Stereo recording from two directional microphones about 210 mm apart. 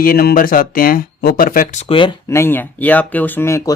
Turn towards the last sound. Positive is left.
turn(degrees=15)  # may be behind; listen again after turning